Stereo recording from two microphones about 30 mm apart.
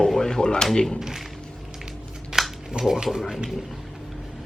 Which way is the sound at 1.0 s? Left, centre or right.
Centre.